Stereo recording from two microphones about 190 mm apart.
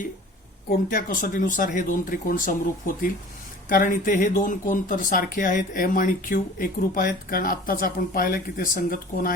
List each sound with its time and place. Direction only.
0.9 s speech: 50° left (ahead or behind)